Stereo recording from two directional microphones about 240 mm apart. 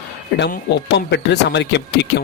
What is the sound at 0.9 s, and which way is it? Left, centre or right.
Speech, left.